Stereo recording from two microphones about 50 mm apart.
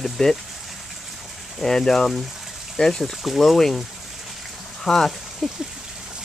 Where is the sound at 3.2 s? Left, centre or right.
Centre.